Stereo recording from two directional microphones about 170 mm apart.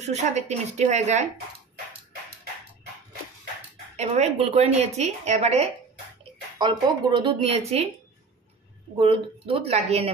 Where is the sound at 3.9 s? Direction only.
40° right (ahead or behind).